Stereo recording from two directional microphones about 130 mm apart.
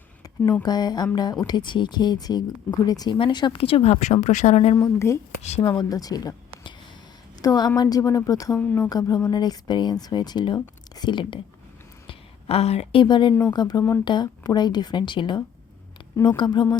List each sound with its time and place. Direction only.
0.6 s a woman's voice: 30° left (ahead or behind); by 4.7 s 60° left (ahead or behind)
4.8 s speech: 20° left (ahead or behind)
5.4 s speech: 60° left (ahead or behind)
5.6 s speech: 30° left (ahead or behind)
7.4 s a woman's voice: 30° left (ahead or behind)
8.5 s speech: 15° left (ahead or behind)
8.9 s speech: 30° left (ahead or behind)
12.0 s speech: 50° left (ahead or behind); by 16.6 s 35° left (ahead or behind)